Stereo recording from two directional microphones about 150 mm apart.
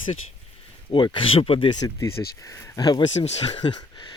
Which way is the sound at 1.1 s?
40° left (ahead or behind).